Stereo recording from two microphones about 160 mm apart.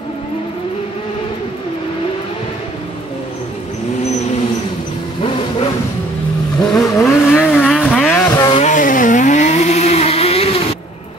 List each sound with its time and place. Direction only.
6.6 s vehicle: centre (ahead or behind)
8.3 s vehicle: 25° left (ahead or behind)
8.5 s vehicle: 50° left (ahead or behind)